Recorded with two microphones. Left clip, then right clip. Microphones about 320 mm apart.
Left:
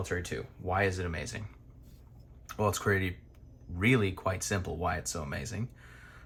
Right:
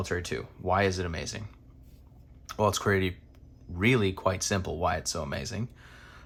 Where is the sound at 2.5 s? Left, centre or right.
Centre.